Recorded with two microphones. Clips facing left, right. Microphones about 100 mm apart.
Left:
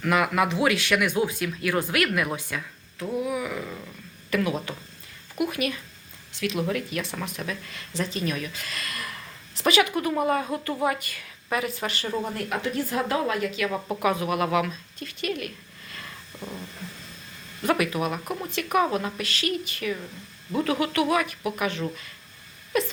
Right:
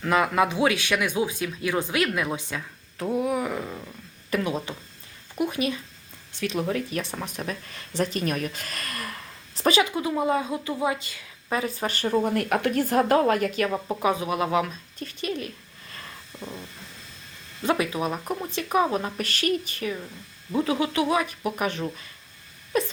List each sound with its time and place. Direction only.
0.0 s speech: 25° right (ahead or behind)
3.2 s speech: 40° right (ahead or behind)
3.6 s speech: 20° right (ahead or behind); by 12.1 s 35° right (ahead or behind)
12.2 s speech: 55° right (ahead or behind)
13.7 s speech: 5° right (ahead or behind)
14.0 s speech: 30° right (ahead or behind)
15.3 s a sound: 30° right (ahead or behind)
17.6 s speech: 25° right (ahead or behind)
19.1 s speech: 45° right (ahead or behind)
20.6 s speech: 25° right (ahead or behind)
21.6 s speech: 40° right (ahead or behind)